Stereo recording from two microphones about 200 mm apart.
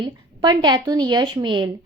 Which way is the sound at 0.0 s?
20° right (ahead or behind).